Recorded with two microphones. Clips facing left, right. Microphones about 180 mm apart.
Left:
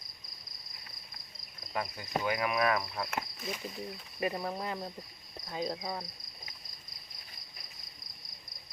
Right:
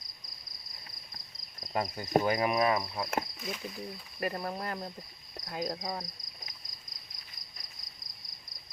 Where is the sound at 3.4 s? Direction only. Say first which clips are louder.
Even; centre (ahead or behind).